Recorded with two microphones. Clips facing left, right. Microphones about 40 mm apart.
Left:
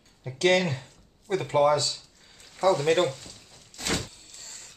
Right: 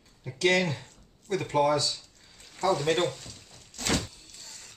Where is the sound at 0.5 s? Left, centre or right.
Left.